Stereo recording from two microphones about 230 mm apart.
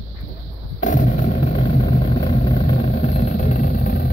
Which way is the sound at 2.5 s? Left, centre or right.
Left.